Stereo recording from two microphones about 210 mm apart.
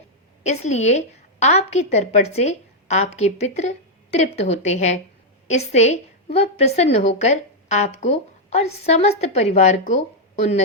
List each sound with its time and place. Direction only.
0.4 s a woman's voice: 30° left (ahead or behind)